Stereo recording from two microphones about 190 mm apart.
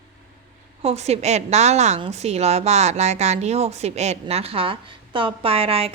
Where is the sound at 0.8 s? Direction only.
35° right (ahead or behind).